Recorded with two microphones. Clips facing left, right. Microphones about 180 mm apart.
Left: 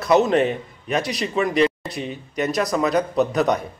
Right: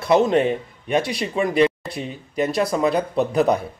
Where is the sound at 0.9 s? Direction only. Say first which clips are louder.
Right 1 dB; 25° right (ahead or behind).